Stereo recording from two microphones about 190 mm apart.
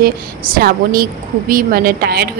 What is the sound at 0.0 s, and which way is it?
A woman's voice, 50° right (ahead or behind).